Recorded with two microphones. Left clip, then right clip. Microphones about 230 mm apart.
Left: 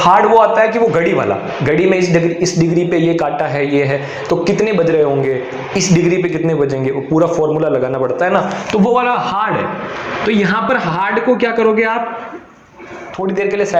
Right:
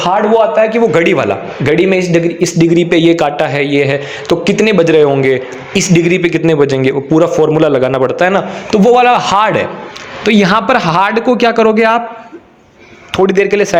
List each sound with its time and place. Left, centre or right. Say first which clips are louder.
0.0 s a man's voice: left 1 dB; right
8.9 s a man's voice: right 8 dB; right
13.1 s a man's voice: right 7 dB; right